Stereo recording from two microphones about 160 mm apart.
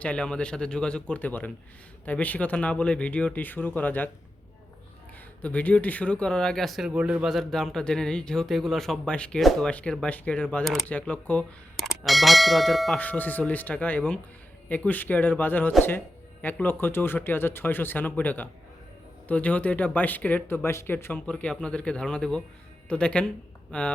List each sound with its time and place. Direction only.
0.0 s speech: 5° left (ahead or behind)
5.4 s speech: 10° left (ahead or behind)